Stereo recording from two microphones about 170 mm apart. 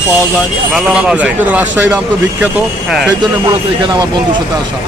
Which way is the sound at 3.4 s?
25° right (ahead or behind).